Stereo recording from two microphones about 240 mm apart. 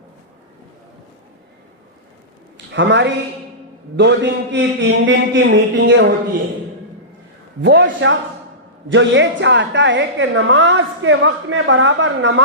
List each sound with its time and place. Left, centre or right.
2.7 s a woman's voice: right
7.6 s a woman's voice: right